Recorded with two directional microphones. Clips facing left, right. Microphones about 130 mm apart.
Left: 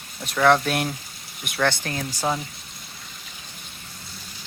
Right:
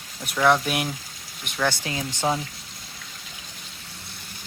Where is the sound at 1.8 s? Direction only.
15° right (ahead or behind).